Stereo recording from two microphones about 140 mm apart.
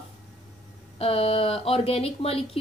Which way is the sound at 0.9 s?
45° left (ahead or behind).